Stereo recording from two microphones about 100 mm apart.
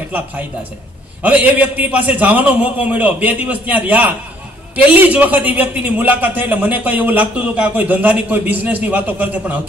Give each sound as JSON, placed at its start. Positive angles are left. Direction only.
{"t": 1.2, "sound": "a man's voice", "side_deg": -15}